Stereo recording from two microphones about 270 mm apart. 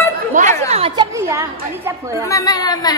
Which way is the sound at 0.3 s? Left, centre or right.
Right.